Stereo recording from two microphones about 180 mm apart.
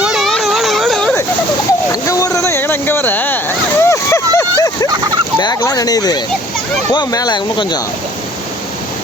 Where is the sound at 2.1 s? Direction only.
15° left (ahead or behind).